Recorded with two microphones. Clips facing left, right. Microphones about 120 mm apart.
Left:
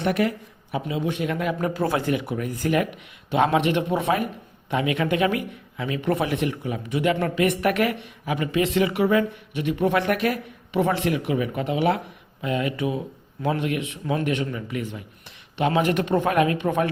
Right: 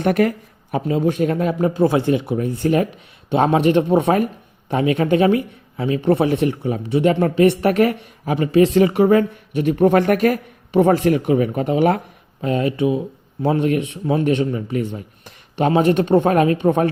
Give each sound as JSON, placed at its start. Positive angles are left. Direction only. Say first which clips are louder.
{"t": 0.0, "sound": "speech", "louder": "right 6 dB", "side_deg": -45}
{"t": 1.6, "sound": "speech", "louder": "right 8 dB", "side_deg": -25}
{"t": 13.4, "sound": "speech", "louder": "right 7 dB", "side_deg": -35}